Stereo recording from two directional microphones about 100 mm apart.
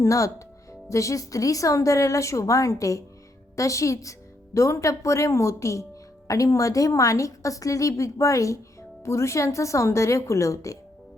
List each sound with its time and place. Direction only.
0.0 s a woman's voice: 30° left (ahead or behind)